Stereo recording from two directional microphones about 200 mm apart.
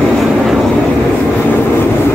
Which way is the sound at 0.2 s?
Centre (ahead or behind).